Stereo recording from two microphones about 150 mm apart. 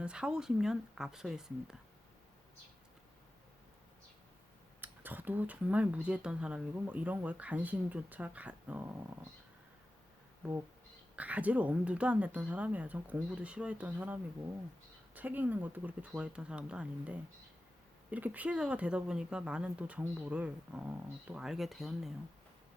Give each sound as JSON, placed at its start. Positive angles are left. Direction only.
{"t": 0.0, "sound": "speech", "side_deg": -5}
{"t": 4.8, "sound": "speech", "side_deg": -10}
{"t": 11.2, "sound": "speech", "side_deg": -10}